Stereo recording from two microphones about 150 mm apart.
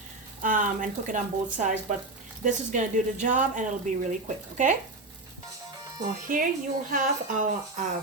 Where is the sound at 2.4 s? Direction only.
55° right (ahead or behind).